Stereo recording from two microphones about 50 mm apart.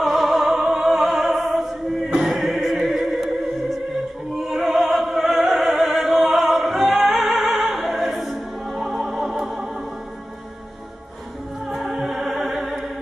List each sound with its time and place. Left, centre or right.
0.0 s music: centre
4.4 s opera: centre
7.8 s music: centre
11.7 s music: centre
12.0 s music: centre